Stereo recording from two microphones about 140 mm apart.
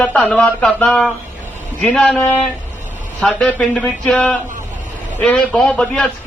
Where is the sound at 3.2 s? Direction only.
5° left (ahead or behind).